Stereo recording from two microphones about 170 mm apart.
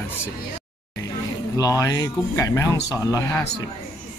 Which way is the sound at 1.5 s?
20° left (ahead or behind).